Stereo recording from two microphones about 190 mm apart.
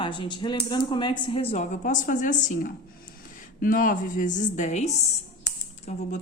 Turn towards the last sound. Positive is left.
turn(degrees=40)  # may be behind; listen again after turning